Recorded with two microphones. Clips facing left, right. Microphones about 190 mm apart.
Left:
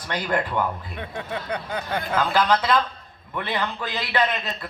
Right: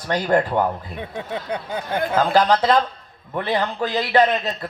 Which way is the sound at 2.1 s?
40° right (ahead or behind).